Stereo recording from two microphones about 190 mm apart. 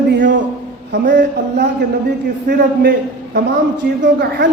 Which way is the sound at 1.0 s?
45° right (ahead or behind).